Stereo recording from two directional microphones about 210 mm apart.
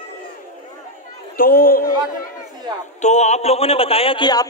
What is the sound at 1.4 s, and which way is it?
Speech, 45° left (ahead or behind).